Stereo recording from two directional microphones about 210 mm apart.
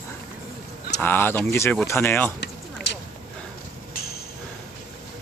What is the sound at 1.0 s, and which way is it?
Speech, 10° left (ahead or behind).